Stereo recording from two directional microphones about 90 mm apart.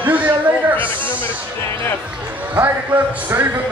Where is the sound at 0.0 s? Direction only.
20° right (ahead or behind).